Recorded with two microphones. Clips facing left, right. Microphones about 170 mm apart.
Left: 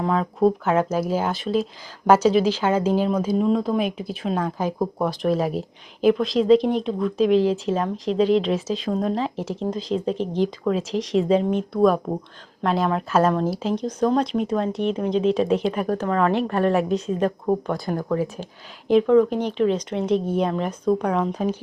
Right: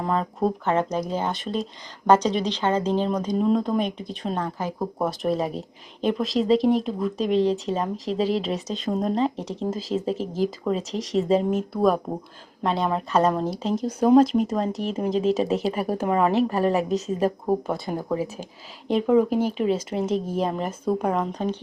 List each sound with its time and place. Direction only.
0.0 s speech: centre (ahead or behind)
4.9 s speech: centre (ahead or behind)